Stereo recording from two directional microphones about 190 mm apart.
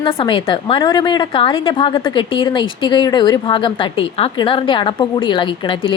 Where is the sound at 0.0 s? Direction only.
30° left (ahead or behind).